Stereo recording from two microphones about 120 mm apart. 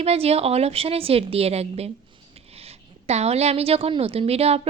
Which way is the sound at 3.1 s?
65° right (ahead or behind).